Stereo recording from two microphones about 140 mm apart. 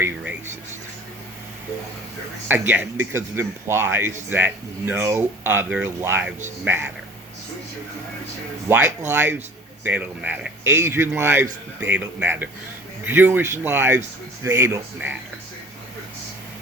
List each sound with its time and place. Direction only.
2.5 s speech: 10° right (ahead or behind)
8.7 s speech: 15° right (ahead or behind)